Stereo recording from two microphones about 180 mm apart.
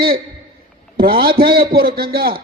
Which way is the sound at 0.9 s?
55° right (ahead or behind).